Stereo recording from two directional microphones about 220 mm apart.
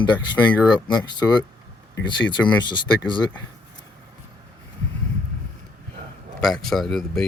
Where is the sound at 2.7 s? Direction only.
20° left (ahead or behind).